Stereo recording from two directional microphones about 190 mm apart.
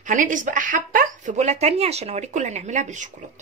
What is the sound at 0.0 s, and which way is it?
A woman's voice, 40° right (ahead or behind).